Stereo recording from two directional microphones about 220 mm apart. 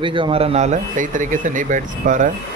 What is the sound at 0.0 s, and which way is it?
Speech, 20° right (ahead or behind).